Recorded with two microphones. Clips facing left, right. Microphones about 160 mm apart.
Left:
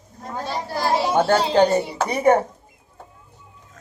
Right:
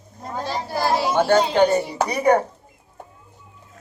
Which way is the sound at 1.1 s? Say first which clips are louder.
Even; 35° left (ahead or behind).